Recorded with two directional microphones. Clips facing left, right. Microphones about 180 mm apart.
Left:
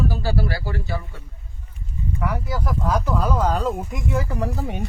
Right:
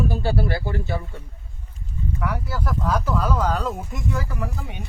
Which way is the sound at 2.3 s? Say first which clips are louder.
Left 1 dB; 10° left (ahead or behind).